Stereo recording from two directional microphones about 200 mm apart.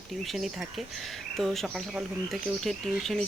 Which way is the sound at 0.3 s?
Centre (ahead or behind).